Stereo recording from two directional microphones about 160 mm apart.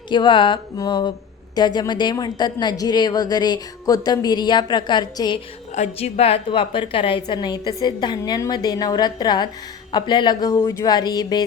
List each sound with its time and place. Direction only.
0.1 s a woman's voice: 30° left (ahead or behind)
5.7 s a woman's voice: 40° left (ahead or behind); by 11.4 s 25° left (ahead or behind)